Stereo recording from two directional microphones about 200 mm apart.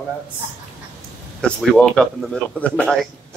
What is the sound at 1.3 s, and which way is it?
Speech, 5° left (ahead or behind).